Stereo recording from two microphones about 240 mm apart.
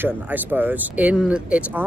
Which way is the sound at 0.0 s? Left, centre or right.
Centre.